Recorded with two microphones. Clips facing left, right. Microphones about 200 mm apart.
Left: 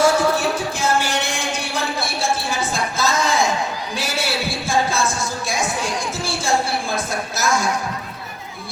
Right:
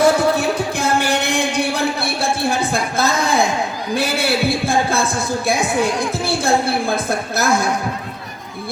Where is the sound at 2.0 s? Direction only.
60° right (ahead or behind).